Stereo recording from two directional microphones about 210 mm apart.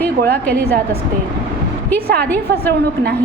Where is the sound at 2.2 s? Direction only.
10° left (ahead or behind).